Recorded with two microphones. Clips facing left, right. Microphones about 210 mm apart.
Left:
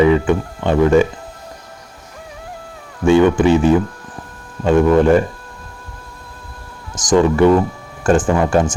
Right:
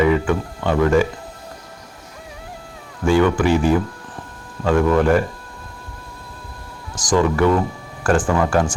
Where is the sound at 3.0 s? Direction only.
25° left (ahead or behind).